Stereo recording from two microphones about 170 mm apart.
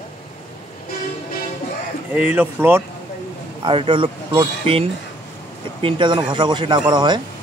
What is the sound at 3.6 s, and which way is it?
Speech, 30° right (ahead or behind).